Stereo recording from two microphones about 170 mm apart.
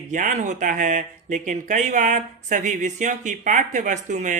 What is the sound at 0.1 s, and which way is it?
A man's voice, 50° right (ahead or behind).